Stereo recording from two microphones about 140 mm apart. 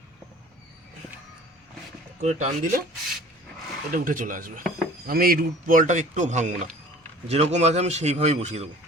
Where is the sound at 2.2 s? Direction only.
55° right (ahead or behind).